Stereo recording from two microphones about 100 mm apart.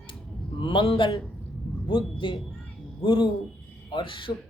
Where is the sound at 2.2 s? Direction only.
55° left (ahead or behind).